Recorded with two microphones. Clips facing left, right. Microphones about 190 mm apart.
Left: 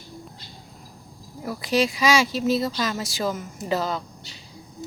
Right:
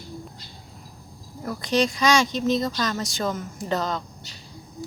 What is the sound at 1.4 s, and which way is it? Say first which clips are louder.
Speech: even; 5° left (ahead or behind).